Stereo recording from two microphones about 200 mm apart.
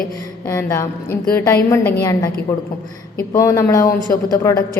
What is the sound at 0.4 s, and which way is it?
A woman's voice, 15° left (ahead or behind).